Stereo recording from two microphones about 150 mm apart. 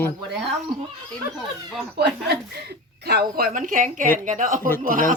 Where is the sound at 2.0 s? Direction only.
90° right; by 5.1 s 65° right (ahead or behind).